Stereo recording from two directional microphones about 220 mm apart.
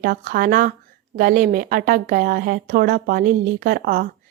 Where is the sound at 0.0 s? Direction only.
40° right (ahead or behind).